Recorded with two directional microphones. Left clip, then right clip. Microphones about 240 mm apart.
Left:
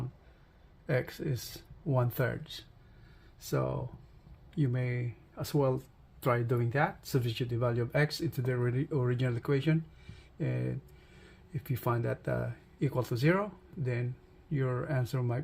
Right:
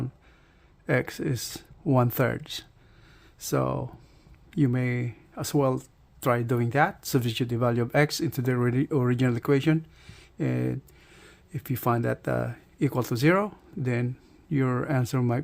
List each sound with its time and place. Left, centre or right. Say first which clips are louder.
0.9 s speech: right 7 dB; right